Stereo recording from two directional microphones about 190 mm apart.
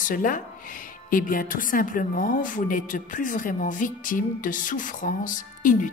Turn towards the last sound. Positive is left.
turn(degrees=45)  # may be behind; listen again after turning